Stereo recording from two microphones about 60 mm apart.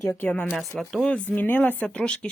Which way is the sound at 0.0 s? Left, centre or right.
Left.